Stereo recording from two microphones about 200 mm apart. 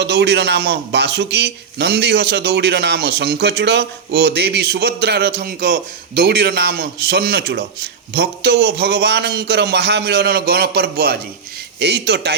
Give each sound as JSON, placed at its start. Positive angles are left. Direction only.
{"t": 0.0, "sound": "a man's voice", "side_deg": -55}